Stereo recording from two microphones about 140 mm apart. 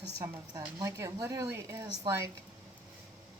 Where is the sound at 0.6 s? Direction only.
25° right (ahead or behind).